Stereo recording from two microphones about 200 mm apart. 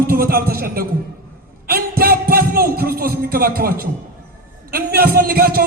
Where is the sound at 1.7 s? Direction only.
45° right (ahead or behind).